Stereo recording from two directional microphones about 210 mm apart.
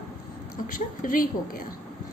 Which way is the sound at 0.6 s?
40° left (ahead or behind).